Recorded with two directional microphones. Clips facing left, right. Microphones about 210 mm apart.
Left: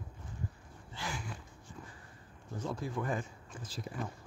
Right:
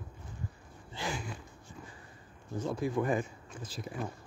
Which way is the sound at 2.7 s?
15° right (ahead or behind).